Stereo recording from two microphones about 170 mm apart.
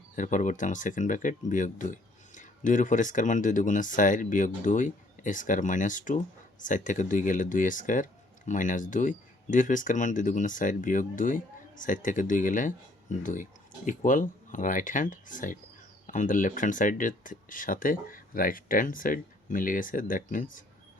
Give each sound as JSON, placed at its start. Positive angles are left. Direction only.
{"t": 0.2, "sound": "speech", "side_deg": 50}